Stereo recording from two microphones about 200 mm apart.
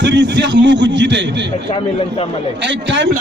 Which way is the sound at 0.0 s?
60° right (ahead or behind).